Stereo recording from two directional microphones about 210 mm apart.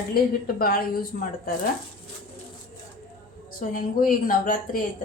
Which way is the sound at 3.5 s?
45° left (ahead or behind).